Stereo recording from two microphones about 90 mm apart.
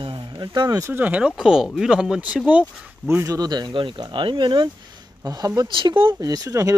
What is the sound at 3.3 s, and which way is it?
Speech, 50° right (ahead or behind).